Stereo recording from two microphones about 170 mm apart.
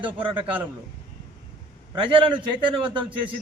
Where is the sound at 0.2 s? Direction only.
30° right (ahead or behind).